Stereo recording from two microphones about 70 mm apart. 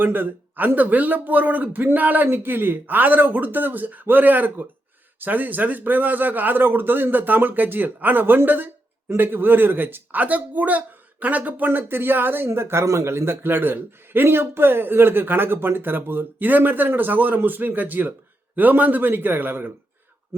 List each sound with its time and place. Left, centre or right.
0.0 s a man's voice: right